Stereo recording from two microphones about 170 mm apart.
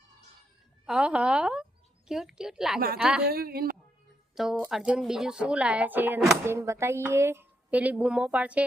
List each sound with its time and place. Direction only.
0.9 s a woman's voice: 5° right (ahead or behind)
3.2 s a woman's voice: 65° right (ahead or behind)
4.4 s a woman's voice: 5° right (ahead or behind)